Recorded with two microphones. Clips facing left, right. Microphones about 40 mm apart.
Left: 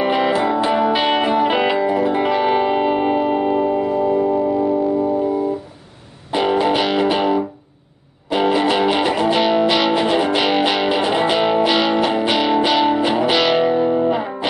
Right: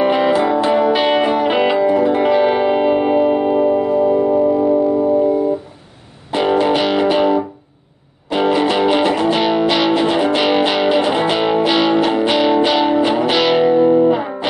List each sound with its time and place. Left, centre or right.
0.0 s music: centre
6.3 s music: centre